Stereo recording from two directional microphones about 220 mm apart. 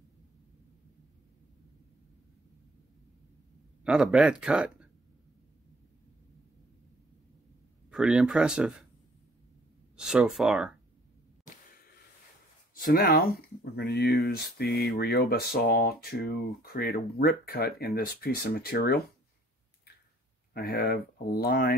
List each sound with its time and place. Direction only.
3.8 s speech: 5° right (ahead or behind)
7.9 s speech: 5° right (ahead or behind)
9.9 s speech: 5° right (ahead or behind)
12.7 s speech: 40° left (ahead or behind)
20.5 s speech: 45° left (ahead or behind)